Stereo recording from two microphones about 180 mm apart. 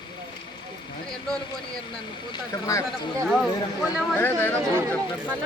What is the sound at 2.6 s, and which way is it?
Speech, 15° left (ahead or behind).